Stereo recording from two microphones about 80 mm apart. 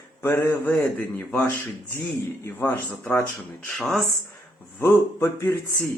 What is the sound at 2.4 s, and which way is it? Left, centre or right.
Speech, left.